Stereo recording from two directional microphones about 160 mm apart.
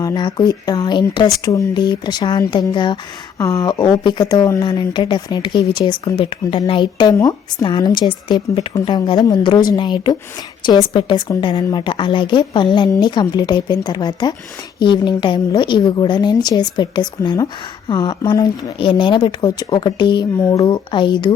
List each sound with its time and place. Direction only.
0.0 s a woman's voice: 25° left (ahead or behind)